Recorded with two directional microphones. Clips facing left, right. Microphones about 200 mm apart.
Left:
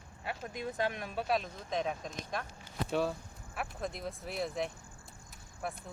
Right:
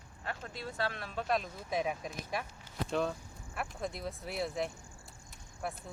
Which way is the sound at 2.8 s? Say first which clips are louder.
Left 1 dB; 5° left (ahead or behind).